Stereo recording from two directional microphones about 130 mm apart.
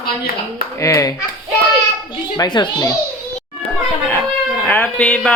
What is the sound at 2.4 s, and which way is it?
Speech, 30° left (ahead or behind).